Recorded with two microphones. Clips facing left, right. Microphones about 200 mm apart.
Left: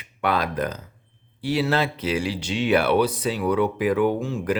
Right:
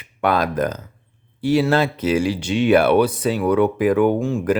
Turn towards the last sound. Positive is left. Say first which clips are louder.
# right 5 dB
turn(degrees=-50)  # may be behind; listen again after turning